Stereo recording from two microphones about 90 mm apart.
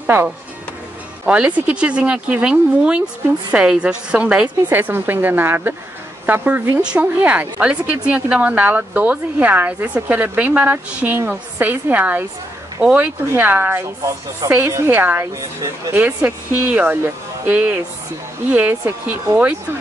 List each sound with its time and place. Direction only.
0.0 s a woman's voice: 20° right (ahead or behind)
4.6 s a woman's voice: 25° right (ahead or behind)
14.4 s a woman's voice: 45° right (ahead or behind)
14.9 s a woman's voice: 25° right (ahead or behind)